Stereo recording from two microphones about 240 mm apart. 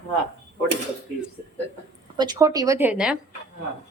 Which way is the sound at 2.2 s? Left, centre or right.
Centre.